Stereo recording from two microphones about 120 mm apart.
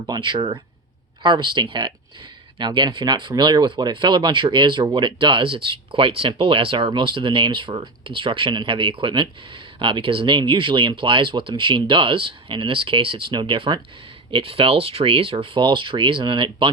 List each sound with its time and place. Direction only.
0.0 s speech: 40° right (ahead or behind)